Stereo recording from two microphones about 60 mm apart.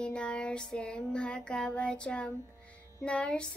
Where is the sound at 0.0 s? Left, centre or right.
Centre.